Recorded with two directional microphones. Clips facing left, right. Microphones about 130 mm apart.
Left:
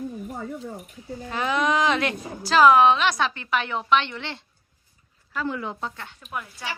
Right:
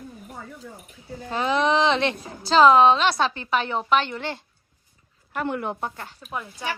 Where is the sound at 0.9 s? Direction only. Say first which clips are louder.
Even; 30° right (ahead or behind).